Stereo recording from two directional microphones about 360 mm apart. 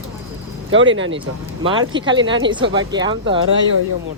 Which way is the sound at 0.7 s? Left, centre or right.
Right.